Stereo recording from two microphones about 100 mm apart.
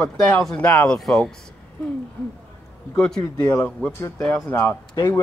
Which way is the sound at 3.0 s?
10° left (ahead or behind).